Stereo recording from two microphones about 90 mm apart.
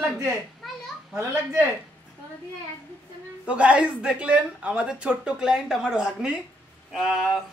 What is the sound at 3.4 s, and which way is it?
A woman's voice, 15° right (ahead or behind).